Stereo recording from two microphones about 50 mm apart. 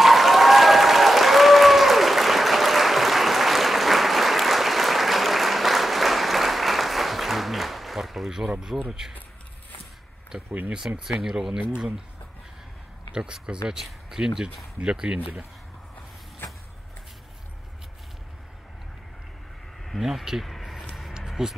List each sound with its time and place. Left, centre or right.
0.0 s applause: centre
8.3 s speech: centre
10.7 s speech: centre
13.1 s speech: centre
20.0 s speech: centre
21.4 s speech: centre